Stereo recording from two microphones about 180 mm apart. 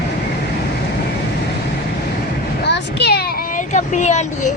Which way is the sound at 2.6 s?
65° left (ahead or behind).